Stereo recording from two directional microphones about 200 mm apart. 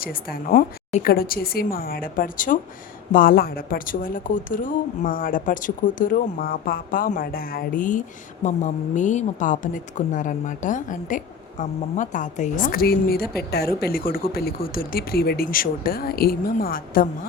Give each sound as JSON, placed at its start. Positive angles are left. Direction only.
{"t": 0.0, "sound": "a woman's voice", "side_deg": 45}